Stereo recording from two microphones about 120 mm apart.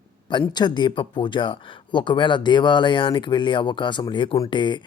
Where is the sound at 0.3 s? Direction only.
40° left (ahead or behind).